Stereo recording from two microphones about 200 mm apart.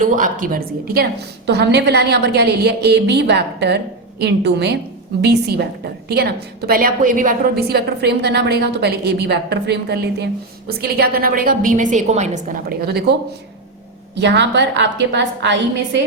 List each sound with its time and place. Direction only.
0.0 s a woman's voice: 40° right (ahead or behind)
12.8 s a woman's voice: 55° right (ahead or behind)
14.2 s a woman's voice: 60° right (ahead or behind)